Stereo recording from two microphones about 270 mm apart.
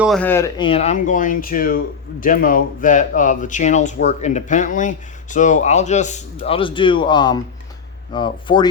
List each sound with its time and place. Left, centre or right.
0.0 s speech: centre